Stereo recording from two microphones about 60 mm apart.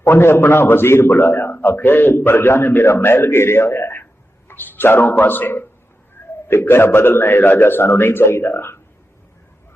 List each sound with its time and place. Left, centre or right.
0.0 s a man's voice: left